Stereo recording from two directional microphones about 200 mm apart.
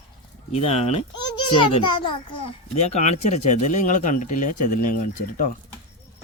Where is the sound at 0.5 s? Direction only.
30° left (ahead or behind).